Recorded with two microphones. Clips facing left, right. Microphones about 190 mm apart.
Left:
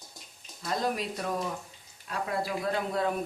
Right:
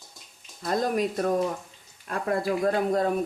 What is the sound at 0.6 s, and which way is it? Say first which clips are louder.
Speech: right 6 dB; 45° right (ahead or behind).